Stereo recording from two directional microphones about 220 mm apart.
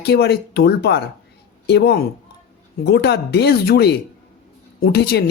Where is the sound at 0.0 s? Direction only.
50° left (ahead or behind).